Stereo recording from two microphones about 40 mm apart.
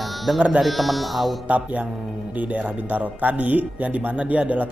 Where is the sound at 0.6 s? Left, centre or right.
Centre.